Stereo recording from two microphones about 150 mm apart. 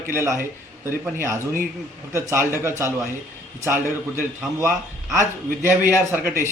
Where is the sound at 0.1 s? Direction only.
15° right (ahead or behind).